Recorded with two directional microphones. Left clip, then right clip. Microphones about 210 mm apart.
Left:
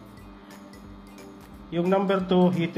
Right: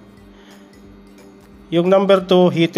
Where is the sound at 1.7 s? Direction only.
45° right (ahead or behind).